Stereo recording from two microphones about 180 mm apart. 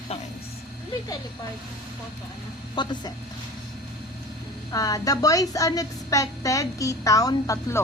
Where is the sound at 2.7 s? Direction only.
25° left (ahead or behind).